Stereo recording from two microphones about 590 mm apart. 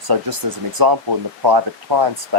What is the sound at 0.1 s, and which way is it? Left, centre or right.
Speech, right.